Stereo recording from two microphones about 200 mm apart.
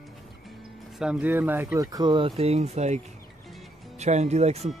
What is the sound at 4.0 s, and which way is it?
Speech, 35° right (ahead or behind).